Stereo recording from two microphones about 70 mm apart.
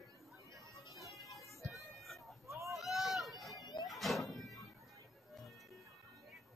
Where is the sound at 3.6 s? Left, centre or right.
Left.